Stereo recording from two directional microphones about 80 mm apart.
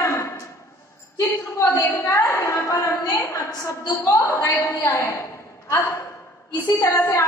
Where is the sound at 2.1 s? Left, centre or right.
Left.